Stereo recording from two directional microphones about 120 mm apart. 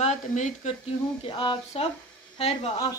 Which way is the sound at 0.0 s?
85° left.